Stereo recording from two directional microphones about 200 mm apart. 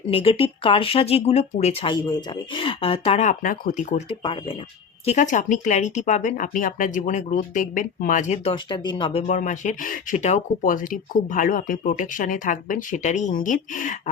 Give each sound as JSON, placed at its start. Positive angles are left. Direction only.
{"t": 0.1, "sound": "speech", "side_deg": 30}
{"t": 4.2, "sound": "speech", "side_deg": 25}
{"t": 5.0, "sound": "speech", "side_deg": 35}